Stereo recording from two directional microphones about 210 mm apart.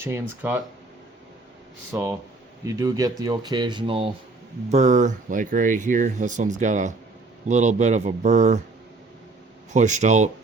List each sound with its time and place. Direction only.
0.0 s speech: 10° right (ahead or behind)
1.9 s speech: 10° right (ahead or behind); by 8.6 s 35° right (ahead or behind)
9.7 s speech: 35° right (ahead or behind)